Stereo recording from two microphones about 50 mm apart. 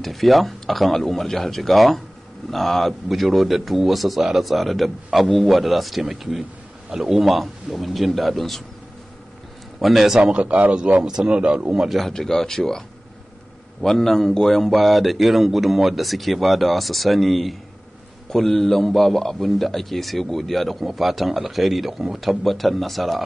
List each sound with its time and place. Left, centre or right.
0.0 s a man's voice: centre
9.8 s a man's voice: centre
10.4 s speech: right
12.1 s a man's voice: centre